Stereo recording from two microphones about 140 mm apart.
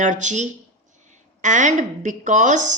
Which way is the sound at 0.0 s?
60° right (ahead or behind).